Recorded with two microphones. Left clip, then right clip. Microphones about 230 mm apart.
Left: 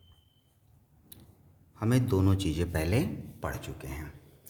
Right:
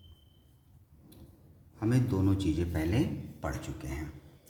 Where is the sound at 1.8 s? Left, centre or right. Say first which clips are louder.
Left 2 dB; left.